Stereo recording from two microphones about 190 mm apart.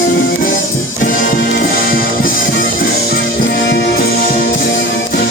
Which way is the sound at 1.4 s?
50° left (ahead or behind).